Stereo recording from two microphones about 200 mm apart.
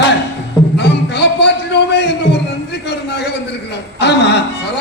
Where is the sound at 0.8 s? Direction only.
60° left (ahead or behind).